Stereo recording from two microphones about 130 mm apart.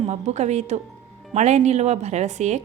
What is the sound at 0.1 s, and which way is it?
A woman's voice, 60° right (ahead or behind).